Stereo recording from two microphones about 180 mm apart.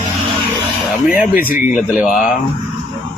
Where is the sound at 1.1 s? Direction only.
55° left (ahead or behind).